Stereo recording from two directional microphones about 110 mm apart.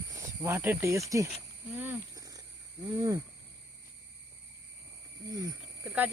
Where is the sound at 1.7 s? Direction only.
20° right (ahead or behind).